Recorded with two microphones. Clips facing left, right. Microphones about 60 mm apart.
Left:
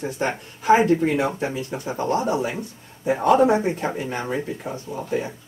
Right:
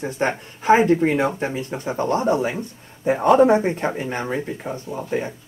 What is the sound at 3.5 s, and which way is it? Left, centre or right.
Speech, right.